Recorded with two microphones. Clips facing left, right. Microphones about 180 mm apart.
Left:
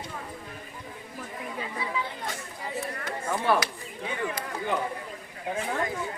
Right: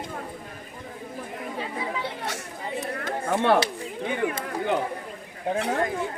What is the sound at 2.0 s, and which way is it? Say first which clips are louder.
Chatter: right 2 dB; 80° right.